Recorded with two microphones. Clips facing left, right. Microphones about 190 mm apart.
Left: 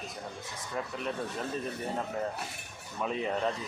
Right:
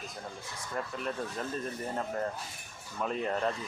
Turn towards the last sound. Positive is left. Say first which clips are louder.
# even
turn(degrees=0)  # may be behind; listen again after turning